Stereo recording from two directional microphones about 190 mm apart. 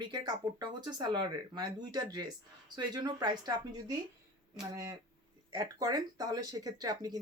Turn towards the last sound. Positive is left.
turn(degrees=-20)  # may be behind; listen again after turning